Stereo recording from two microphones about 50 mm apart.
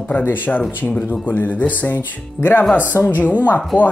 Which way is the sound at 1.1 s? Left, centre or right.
Left.